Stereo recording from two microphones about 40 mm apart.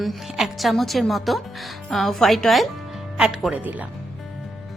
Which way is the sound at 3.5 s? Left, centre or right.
Right.